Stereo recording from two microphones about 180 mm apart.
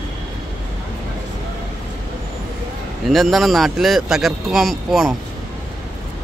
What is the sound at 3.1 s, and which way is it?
Speech, centre (ahead or behind).